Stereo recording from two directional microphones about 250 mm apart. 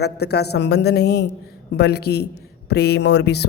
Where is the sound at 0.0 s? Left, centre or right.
Left.